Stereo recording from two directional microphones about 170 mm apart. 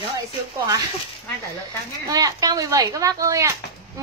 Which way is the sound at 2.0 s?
20° right (ahead or behind).